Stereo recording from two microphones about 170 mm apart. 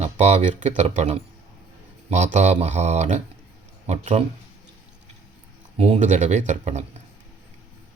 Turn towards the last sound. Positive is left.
turn(degrees=-40)  # may be behind; listen again after turning